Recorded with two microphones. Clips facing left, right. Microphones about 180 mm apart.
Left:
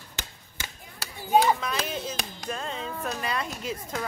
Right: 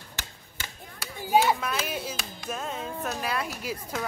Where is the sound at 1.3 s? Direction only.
5° right (ahead or behind).